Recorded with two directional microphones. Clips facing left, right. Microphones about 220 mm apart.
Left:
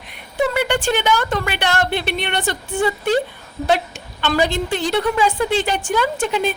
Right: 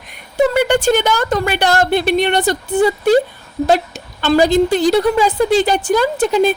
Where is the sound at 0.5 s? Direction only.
40° right (ahead or behind).